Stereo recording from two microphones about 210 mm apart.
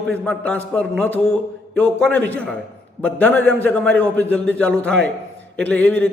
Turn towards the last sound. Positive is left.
turn(degrees=5)  # may be behind; listen again after turning